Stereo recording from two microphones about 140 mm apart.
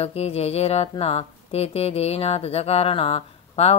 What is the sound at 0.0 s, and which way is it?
Music, 45° left (ahead or behind).